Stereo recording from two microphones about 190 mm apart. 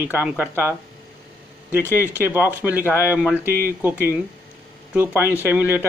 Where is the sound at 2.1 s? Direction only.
10° right (ahead or behind).